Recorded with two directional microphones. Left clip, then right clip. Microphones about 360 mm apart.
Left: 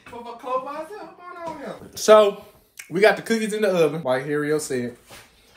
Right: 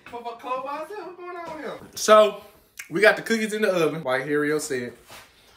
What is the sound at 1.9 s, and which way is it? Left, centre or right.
Speech, centre.